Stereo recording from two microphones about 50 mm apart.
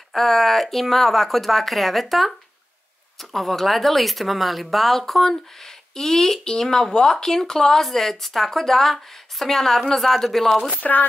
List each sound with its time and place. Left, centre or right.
0.1 s speech: centre
10.8 s speech: left